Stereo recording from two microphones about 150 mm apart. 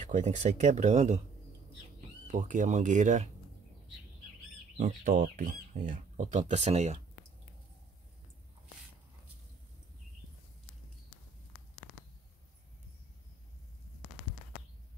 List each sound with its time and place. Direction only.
0.0 s speech: 55° right (ahead or behind)
2.3 s speech: 60° right (ahead or behind)
4.7 s speech: 60° right (ahead or behind)